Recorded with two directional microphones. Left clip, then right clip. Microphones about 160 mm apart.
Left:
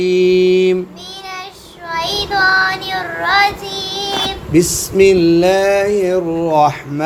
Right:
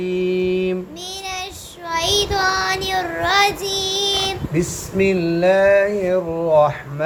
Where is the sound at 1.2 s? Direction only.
60° right (ahead or behind).